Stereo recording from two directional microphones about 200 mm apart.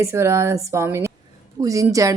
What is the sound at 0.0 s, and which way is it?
A woman's voice, 15° right (ahead or behind).